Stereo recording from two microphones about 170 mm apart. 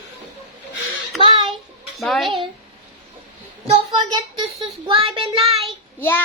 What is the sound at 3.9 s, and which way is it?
A child's voice, 25° right (ahead or behind).